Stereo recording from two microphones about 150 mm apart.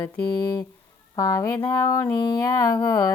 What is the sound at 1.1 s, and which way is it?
Mantra, 20° left (ahead or behind).